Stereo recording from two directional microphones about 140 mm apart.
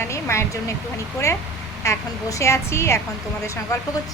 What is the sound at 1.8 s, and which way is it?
A woman's voice, 25° left (ahead or behind).